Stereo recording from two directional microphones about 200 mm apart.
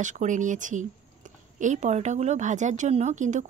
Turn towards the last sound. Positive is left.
turn(degrees=-35)  # may be behind; listen again after turning